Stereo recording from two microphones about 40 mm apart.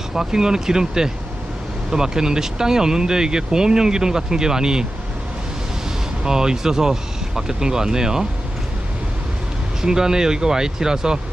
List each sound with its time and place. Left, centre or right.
0.1 s speech: centre
6.2 s speech: centre
9.8 s speech: centre